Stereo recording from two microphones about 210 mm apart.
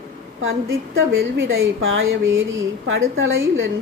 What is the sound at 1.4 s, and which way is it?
A woman's voice, 70° right (ahead or behind).